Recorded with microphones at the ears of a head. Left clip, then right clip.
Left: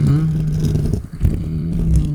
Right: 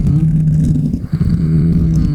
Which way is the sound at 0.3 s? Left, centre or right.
Right.